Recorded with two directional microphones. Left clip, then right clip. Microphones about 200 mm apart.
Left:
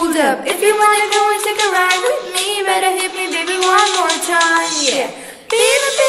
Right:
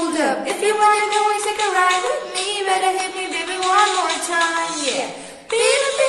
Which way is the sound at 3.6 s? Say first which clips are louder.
Left 3 dB; 50° left (ahead or behind).